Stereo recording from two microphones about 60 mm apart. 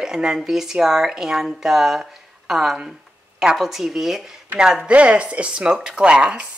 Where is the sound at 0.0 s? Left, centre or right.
Centre.